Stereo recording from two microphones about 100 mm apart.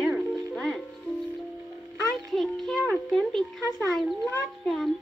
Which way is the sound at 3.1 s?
5° left (ahead or behind).